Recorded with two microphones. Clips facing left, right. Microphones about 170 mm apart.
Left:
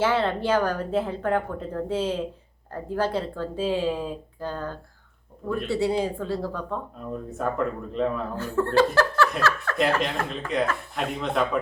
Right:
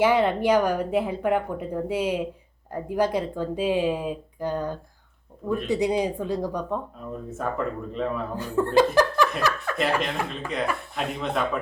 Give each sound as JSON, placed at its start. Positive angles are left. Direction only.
{"t": 0.0, "sound": "speech", "side_deg": -15}
{"t": 7.3, "sound": "speech", "side_deg": 0}
{"t": 8.4, "sound": "speech", "side_deg": -15}
{"t": 9.7, "sound": "speech", "side_deg": 0}